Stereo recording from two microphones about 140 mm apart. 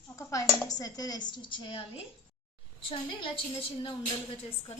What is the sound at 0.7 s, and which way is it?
A woman's voice, 25° left (ahead or behind).